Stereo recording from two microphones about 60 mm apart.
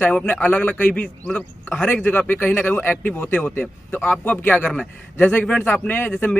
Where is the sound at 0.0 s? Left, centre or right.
Left.